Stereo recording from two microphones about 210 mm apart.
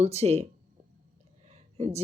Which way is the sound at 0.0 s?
30° right (ahead or behind).